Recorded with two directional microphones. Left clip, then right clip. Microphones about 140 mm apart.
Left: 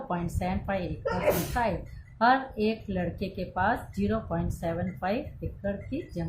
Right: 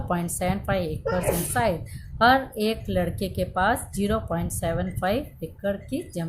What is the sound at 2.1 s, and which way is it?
Speech, 55° right (ahead or behind).